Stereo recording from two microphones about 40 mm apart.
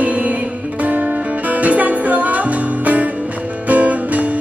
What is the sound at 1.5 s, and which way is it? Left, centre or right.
Music, right.